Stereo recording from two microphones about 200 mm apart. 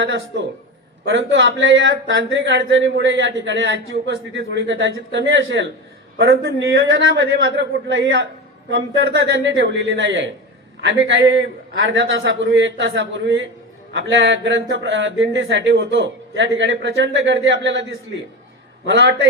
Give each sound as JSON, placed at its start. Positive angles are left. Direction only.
{"t": 0.0, "sound": "a man's voice", "side_deg": -60}
{"t": 18.9, "sound": "speech", "side_deg": -65}